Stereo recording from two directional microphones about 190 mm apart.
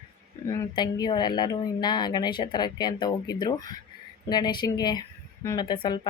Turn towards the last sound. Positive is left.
turn(degrees=25)  # may be behind; listen again after turning